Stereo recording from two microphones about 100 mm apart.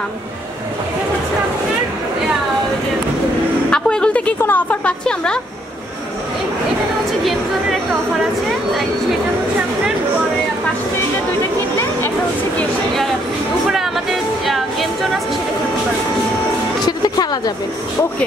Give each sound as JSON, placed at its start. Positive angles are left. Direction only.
{"t": 3.7, "sound": "a sound", "side_deg": 10}
{"t": 4.4, "sound": "a woman's voice", "side_deg": 20}
{"t": 14.4, "sound": "music", "side_deg": 0}
{"t": 16.8, "sound": "speech", "side_deg": 45}